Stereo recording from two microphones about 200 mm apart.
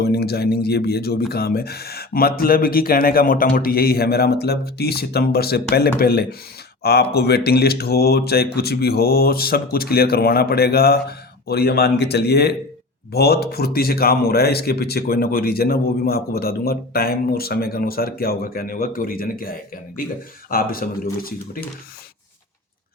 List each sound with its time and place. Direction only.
0.0 s speech: 55° left (ahead or behind)